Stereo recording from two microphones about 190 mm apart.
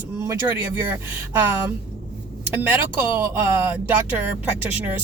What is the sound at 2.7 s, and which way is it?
Speech, 10° right (ahead or behind).